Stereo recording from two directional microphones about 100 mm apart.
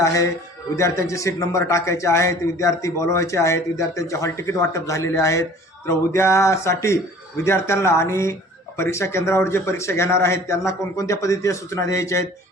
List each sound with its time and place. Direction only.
0.0 s a man's voice: 30° left (ahead or behind)